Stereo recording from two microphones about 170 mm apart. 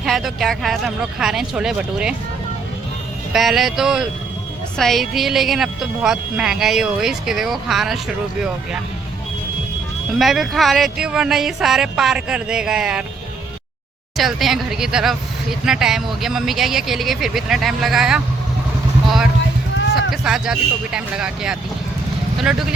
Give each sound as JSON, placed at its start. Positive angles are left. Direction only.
{"t": 0.0, "sound": "speech", "side_deg": 0}
{"t": 3.3, "sound": "speech", "side_deg": 0}
{"t": 10.1, "sound": "speech", "side_deg": 0}
{"t": 14.2, "sound": "speech", "side_deg": 0}
{"t": 20.1, "sound": "speech", "side_deg": -5}